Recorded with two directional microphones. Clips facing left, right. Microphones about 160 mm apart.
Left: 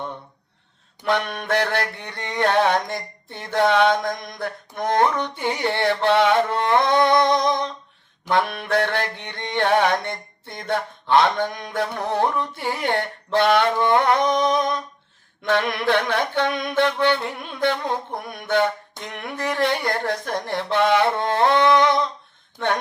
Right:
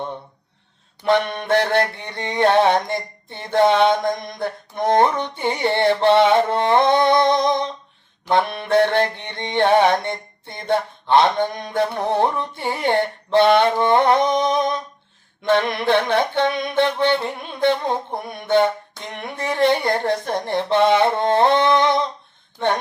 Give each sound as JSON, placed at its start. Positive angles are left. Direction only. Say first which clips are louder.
{"t": 1.0, "sound": "mantra", "louder": "right 4 dB", "side_deg": -25}